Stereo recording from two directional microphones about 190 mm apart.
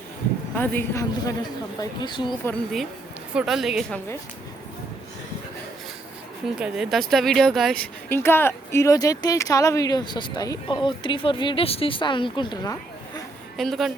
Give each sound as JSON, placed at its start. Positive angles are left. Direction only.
{"t": 0.5, "sound": "speech", "side_deg": 10}
{"t": 3.3, "sound": "a woman's voice", "side_deg": 0}
{"t": 6.6, "sound": "speech", "side_deg": 0}
{"t": 13.6, "sound": "a woman's voice", "side_deg": 0}